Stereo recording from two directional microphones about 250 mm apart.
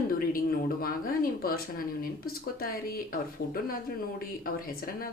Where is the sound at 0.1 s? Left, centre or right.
Left.